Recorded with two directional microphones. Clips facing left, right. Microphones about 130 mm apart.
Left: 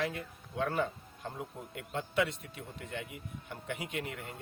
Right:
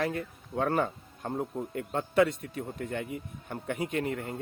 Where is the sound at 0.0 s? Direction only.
45° right (ahead or behind).